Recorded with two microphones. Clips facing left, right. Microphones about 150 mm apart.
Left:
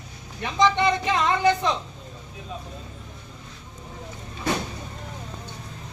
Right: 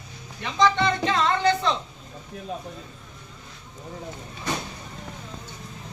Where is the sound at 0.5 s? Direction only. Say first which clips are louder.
Left 1 dB; 15° left (ahead or behind).